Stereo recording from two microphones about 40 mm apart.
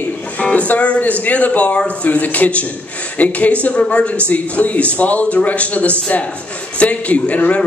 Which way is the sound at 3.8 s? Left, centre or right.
Left.